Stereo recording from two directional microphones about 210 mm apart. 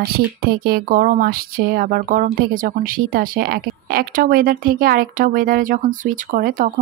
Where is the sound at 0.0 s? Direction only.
45° right (ahead or behind).